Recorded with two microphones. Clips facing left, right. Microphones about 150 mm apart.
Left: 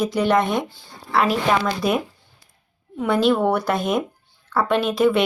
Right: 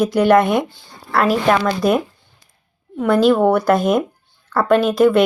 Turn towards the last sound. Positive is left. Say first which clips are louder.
# right 5 dB
turn(degrees=0)  # may be behind; listen again after turning